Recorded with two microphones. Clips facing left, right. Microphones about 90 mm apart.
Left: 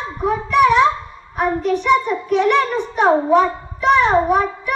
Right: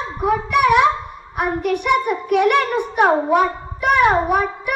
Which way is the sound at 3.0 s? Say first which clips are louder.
Left 2 dB; 55° right (ahead or behind).